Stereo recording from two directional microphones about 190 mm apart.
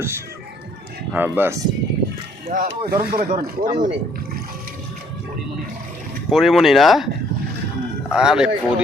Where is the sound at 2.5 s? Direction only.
45° right (ahead or behind).